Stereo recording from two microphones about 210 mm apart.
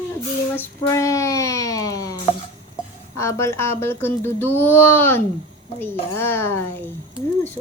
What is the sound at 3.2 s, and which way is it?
Speech, 15° left (ahead or behind).